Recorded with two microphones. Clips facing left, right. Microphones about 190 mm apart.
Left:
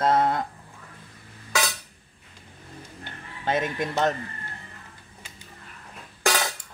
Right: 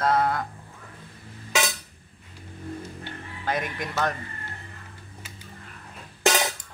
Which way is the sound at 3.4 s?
25° left (ahead or behind).